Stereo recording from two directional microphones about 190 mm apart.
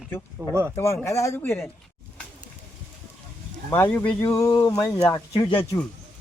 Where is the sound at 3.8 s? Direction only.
5° left (ahead or behind).